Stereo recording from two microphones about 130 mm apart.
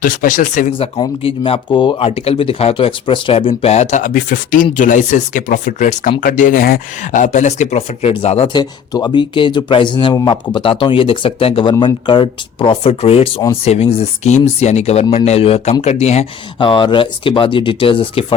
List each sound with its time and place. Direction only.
0.0 s speech: 90° left
0.7 s speech: 45° left (ahead or behind); by 6.7 s 90° left
7.1 s speech: 70° left (ahead or behind); by 8.4 s 50° left (ahead or behind)
8.5 s speech: 30° left (ahead or behind); by 16.2 s 55° left (ahead or behind)
16.6 s speech: 40° left (ahead or behind)